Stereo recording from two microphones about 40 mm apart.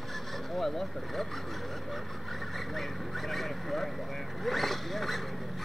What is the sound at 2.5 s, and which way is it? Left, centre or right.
Vehicle, centre.